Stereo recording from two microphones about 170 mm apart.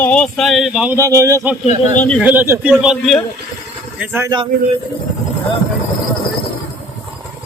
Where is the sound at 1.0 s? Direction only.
20° right (ahead or behind); by 3.2 s centre (ahead or behind).